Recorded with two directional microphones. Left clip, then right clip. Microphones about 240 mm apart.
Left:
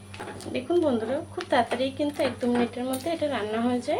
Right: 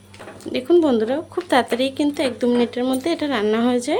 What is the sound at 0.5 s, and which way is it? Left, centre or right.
Speech, right.